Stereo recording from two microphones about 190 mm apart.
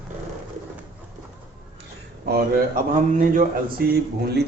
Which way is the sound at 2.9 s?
45° right (ahead or behind).